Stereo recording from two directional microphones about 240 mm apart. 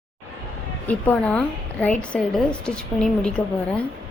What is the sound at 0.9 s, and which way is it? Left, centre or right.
A woman's voice, centre.